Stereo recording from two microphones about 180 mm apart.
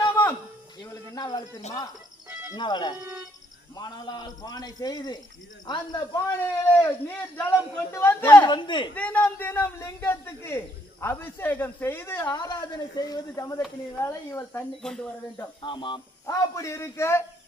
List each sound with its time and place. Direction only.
1.1 s bird: 20° left (ahead or behind)
2.5 s a man's voice: 25° left (ahead or behind)
6.4 s speech: 10° left (ahead or behind)
8.4 s a man's voice: 25° left (ahead or behind)
9.0 s speech: 10° left (ahead or behind)
15.6 s speech: 25° left (ahead or behind)